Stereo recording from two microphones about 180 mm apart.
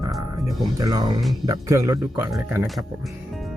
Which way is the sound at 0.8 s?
20° right (ahead or behind).